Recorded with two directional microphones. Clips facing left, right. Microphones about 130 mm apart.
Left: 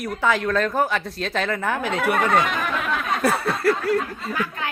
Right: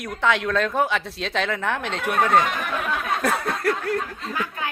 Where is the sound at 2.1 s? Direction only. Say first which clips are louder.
Even; 90° left.